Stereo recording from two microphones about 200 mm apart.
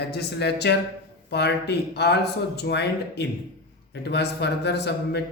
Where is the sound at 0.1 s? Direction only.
55° left (ahead or behind).